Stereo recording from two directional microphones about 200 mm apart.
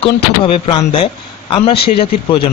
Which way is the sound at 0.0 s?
25° left (ahead or behind).